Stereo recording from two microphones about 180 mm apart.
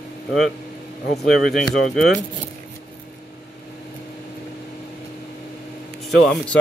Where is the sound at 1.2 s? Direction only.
Centre (ahead or behind).